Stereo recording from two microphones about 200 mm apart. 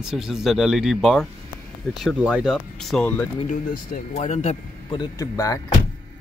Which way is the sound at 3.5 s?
40° left (ahead or behind).